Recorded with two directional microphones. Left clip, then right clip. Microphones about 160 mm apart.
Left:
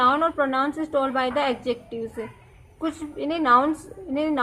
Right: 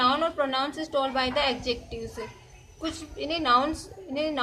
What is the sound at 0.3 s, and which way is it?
A woman's voice, 35° left (ahead or behind).